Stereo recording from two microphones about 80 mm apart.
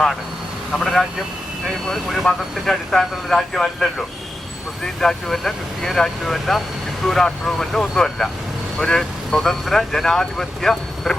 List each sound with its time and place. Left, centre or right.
0.7 s speech: centre